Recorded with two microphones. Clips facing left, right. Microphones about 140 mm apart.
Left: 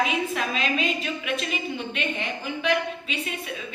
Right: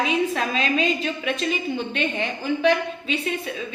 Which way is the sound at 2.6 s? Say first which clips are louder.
Right 4 dB; 30° right (ahead or behind).